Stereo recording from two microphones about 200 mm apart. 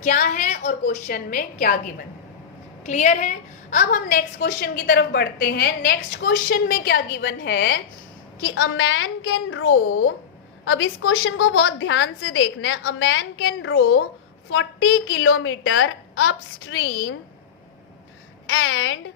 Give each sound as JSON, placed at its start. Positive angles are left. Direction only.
{"t": 0.0, "sound": "a woman's voice", "side_deg": 40}
{"t": 2.8, "sound": "a woman's voice", "side_deg": 35}
{"t": 8.4, "sound": "a woman's voice", "side_deg": 75}
{"t": 14.5, "sound": "a woman's voice", "side_deg": 80}
{"t": 18.4, "sound": "a child's voice", "side_deg": 90}